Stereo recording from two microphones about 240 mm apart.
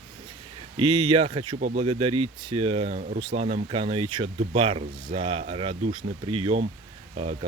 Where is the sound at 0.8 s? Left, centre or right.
Right.